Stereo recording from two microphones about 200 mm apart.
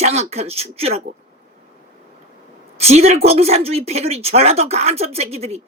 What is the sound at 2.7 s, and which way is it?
A woman's voice, 30° right (ahead or behind).